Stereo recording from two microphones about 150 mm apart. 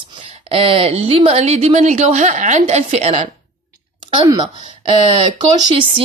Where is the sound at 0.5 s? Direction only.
40° right (ahead or behind).